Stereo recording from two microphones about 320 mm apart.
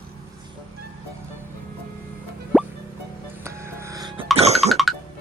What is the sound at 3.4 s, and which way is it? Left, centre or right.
Music, centre.